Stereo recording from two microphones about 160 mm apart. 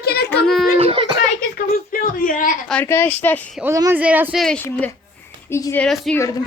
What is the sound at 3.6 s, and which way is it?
Speech, 20° right (ahead or behind).